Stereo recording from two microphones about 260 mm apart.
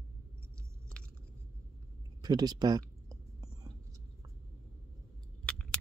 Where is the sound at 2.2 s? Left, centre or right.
Centre.